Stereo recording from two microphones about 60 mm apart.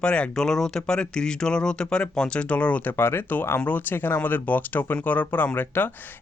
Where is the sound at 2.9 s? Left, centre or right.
Left.